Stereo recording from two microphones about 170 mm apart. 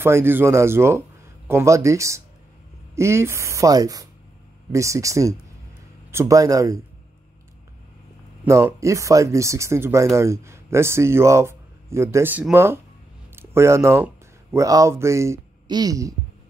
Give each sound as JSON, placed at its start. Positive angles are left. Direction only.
{"t": 0.0, "sound": "speech", "side_deg": -15}
{"t": 8.5, "sound": "speech", "side_deg": -15}